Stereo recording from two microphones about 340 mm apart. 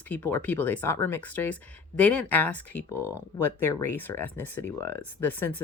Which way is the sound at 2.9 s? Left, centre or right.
Centre.